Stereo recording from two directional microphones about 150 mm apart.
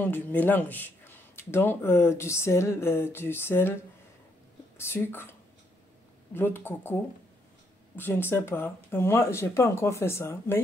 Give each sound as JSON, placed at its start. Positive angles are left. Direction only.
{"t": 0.0, "sound": "speech", "side_deg": 10}
{"t": 6.3, "sound": "speech", "side_deg": 15}